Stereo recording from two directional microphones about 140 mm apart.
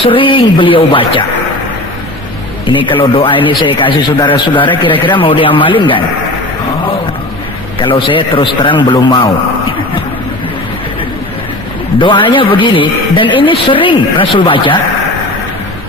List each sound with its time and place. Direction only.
0.0 s a man's voice: 40° left (ahead or behind)
2.6 s a man's voice: 35° left (ahead or behind)
7.8 s a man's voice: 35° left (ahead or behind)
11.9 s a man's voice: 35° left (ahead or behind)